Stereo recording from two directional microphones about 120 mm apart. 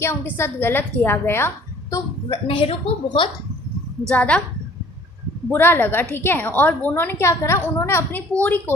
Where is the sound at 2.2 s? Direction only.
50° left (ahead or behind).